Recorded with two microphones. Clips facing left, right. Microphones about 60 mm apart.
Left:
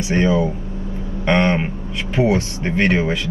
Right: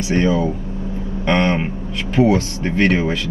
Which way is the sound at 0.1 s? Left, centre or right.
Left.